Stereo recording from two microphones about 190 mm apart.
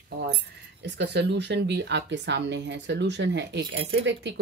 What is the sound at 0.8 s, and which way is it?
Speech, 65° right (ahead or behind).